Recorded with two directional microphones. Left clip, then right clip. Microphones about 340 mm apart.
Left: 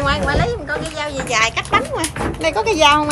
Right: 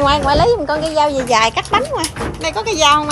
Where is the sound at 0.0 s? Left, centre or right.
Centre.